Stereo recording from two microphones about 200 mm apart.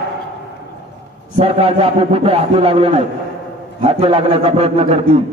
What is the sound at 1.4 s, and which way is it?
A man's voice, 30° right (ahead or behind).